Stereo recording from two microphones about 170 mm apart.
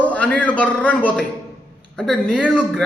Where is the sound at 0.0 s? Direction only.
10° left (ahead or behind).